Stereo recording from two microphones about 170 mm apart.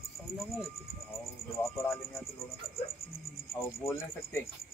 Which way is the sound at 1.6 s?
15° left (ahead or behind).